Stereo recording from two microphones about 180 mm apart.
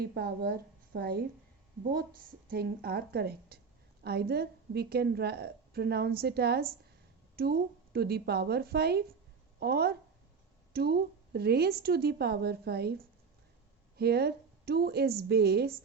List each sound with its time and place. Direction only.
0.0 s a woman's voice: 60° right (ahead or behind)